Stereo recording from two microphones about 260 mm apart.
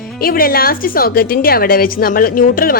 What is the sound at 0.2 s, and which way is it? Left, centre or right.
A woman's voice, left.